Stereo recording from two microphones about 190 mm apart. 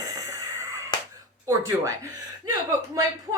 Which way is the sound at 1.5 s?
15° right (ahead or behind).